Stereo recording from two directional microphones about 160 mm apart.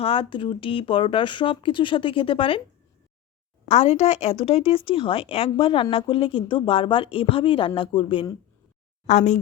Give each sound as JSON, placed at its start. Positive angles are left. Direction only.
{"t": 0.0, "sound": "speech", "side_deg": 35}
{"t": 3.7, "sound": "speech", "side_deg": 40}
{"t": 9.0, "sound": "a woman's voice", "side_deg": 45}